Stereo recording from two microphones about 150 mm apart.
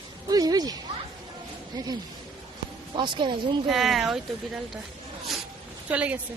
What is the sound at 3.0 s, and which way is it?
Speech, 35° right (ahead or behind).